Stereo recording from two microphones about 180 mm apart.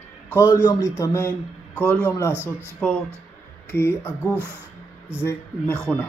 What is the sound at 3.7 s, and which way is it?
Speech, 15° left (ahead or behind).